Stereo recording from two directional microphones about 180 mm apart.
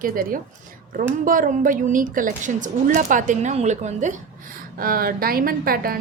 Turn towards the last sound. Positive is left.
turn(degrees=-55)  # may be behind; listen again after turning